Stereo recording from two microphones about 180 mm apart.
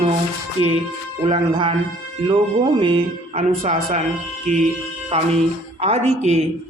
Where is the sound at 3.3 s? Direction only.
45° right (ahead or behind).